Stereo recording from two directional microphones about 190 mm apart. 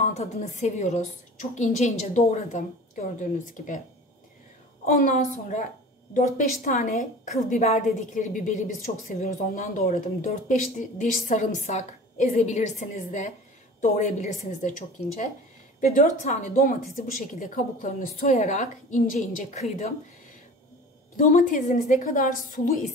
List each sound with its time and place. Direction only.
0.0 s a woman's voice: 35° left (ahead or behind)
4.8 s a woman's voice: 45° left (ahead or behind)
21.2 s a woman's voice: 45° left (ahead or behind)